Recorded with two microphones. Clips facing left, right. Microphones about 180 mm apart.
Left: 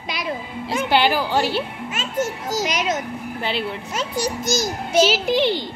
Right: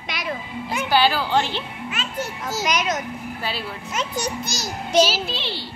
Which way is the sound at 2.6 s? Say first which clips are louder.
Right 1 dB; 25° left (ahead or behind).